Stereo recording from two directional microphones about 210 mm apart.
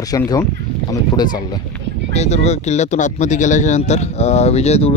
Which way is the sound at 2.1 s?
30° left (ahead or behind).